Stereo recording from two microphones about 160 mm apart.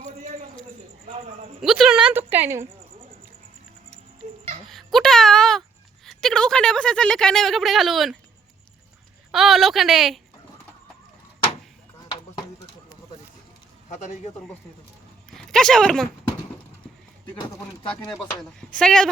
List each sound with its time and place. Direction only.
1.6 s a woman's voice: centre (ahead or behind)
4.7 s a woman's voice: centre (ahead or behind)
9.3 s a woman's voice: centre (ahead or behind)
13.9 s a man's voice: 50° left (ahead or behind)
15.4 s speech: 5° left (ahead or behind)
18.8 s a woman's voice: 5° left (ahead or behind)